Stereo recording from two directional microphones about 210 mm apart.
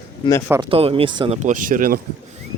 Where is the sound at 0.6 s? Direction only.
25° right (ahead or behind).